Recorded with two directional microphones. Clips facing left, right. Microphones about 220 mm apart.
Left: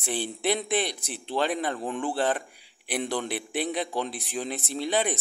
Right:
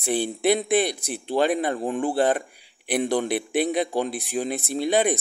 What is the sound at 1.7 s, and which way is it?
Speech, 40° right (ahead or behind).